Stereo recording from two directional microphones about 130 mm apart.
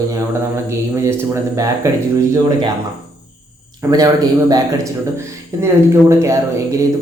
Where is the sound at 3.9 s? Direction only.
30° right (ahead or behind).